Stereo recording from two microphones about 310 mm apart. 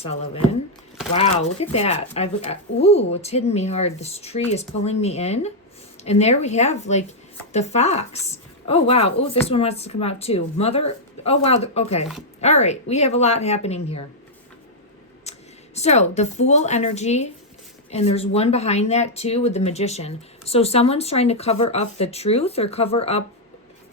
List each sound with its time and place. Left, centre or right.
0.0 s speech: centre
15.2 s speech: left